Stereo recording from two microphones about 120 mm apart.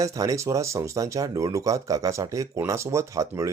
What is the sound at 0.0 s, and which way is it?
Speech, 30° right (ahead or behind).